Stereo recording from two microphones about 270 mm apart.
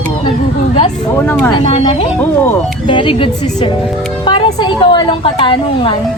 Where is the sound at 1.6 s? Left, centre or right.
Left.